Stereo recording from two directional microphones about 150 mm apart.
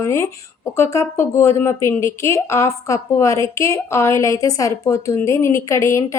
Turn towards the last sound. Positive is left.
turn(degrees=20)  # may be behind; listen again after turning